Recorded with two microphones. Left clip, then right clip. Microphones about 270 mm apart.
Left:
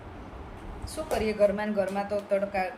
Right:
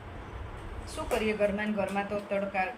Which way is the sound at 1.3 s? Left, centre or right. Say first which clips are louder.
Left 7 dB; centre.